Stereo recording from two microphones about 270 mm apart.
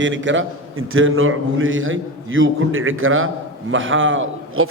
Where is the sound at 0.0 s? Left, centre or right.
Right.